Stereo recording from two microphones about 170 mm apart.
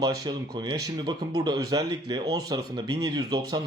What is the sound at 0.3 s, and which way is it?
Speech, 25° right (ahead or behind).